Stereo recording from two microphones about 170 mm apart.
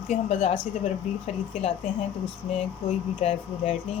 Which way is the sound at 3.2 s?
40° left (ahead or behind).